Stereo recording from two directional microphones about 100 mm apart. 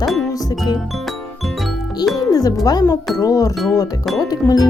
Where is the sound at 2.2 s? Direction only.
40° left (ahead or behind).